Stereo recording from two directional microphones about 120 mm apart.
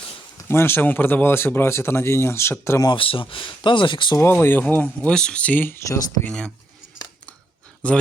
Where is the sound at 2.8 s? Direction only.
45° left (ahead or behind).